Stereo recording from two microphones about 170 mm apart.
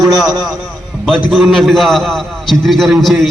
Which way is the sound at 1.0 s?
Centre (ahead or behind).